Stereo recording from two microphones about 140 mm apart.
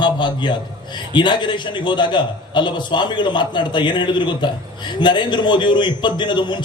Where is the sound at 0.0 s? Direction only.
35° left (ahead or behind).